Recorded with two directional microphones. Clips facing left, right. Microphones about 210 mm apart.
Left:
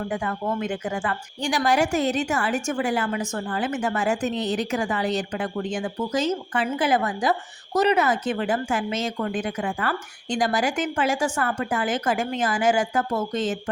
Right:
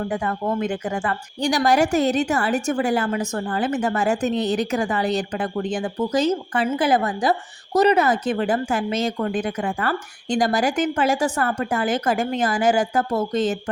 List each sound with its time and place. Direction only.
0.1 s a woman's voice: 40° right (ahead or behind)